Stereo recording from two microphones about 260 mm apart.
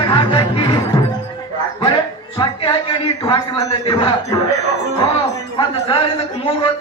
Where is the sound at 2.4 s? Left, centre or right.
Centre.